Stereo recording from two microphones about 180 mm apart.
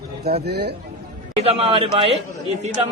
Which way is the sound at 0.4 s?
65° right (ahead or behind).